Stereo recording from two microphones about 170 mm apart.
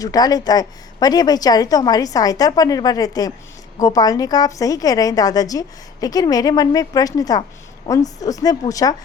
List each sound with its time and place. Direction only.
0.0 s a woman's voice: 20° left (ahead or behind)